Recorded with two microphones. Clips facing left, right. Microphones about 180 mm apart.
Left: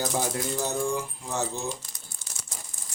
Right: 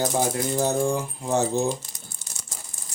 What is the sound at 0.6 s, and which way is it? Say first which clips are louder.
Speech: right 6 dB; 50° right (ahead or behind).